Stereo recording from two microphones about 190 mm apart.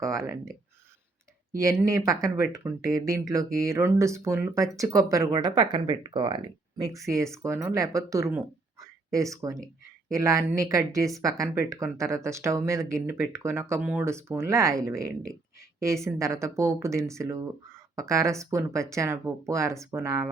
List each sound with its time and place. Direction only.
0.0 s speech: 15° right (ahead or behind)
1.8 s speech: 15° right (ahead or behind)